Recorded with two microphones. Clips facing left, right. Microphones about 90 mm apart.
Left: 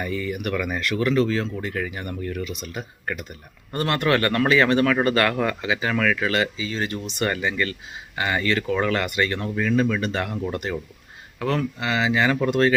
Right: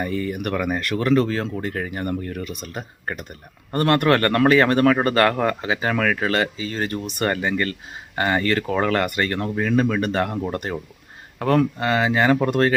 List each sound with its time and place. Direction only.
0.0 s speech: 40° right (ahead or behind)